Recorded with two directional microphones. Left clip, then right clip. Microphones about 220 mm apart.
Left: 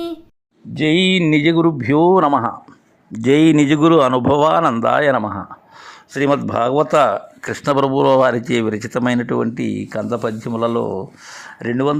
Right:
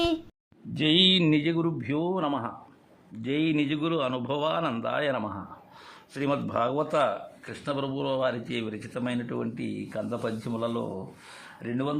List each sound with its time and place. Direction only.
0.7 s speech: 20° left (ahead or behind)